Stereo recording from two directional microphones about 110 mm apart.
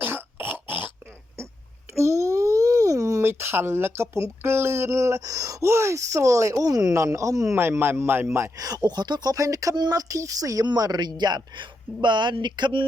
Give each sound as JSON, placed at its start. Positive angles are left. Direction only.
{"t": 0.0, "sound": "cough", "side_deg": -20}
{"t": 2.0, "sound": "a man's voice", "side_deg": -25}